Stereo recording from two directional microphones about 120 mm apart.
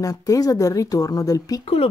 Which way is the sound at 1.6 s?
55° left (ahead or behind).